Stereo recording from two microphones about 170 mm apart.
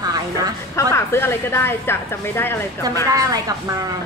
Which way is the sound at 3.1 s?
20° right (ahead or behind).